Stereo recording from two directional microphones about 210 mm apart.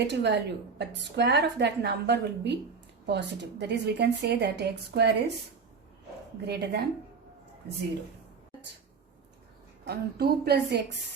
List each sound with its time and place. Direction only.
0.1 s a woman's voice: 55° right (ahead or behind)
6.4 s a woman's voice: 50° right (ahead or behind)
9.8 s a woman's voice: 50° right (ahead or behind)